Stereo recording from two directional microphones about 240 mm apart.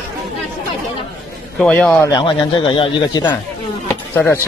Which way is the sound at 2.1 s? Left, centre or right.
Left.